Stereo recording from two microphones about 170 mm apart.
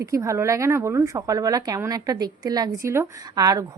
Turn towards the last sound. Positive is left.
turn(degrees=-20)  # may be behind; listen again after turning